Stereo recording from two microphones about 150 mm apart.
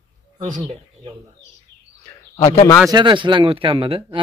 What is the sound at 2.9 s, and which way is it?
Speech, 30° right (ahead or behind).